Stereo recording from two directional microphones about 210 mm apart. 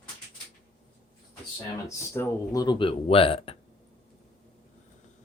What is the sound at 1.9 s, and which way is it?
Speech, 15° left (ahead or behind).